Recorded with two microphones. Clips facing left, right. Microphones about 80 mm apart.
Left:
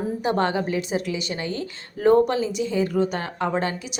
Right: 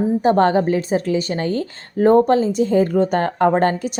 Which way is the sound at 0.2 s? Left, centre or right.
Right.